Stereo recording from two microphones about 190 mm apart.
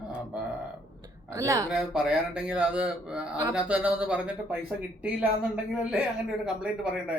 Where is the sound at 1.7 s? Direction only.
5° right (ahead or behind).